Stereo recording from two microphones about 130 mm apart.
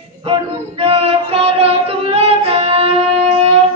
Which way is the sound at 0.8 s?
50° right (ahead or behind).